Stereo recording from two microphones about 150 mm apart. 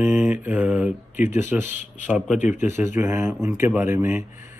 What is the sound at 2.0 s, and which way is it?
Speech, 5° right (ahead or behind).